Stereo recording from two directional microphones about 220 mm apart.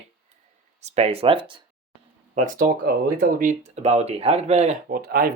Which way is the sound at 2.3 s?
35° right (ahead or behind).